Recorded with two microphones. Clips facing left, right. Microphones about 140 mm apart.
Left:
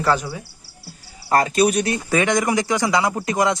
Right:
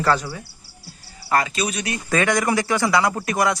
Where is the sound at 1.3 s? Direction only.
40° left (ahead or behind).